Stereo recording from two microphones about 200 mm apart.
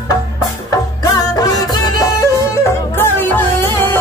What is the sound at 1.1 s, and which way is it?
Music, 20° left (ahead or behind).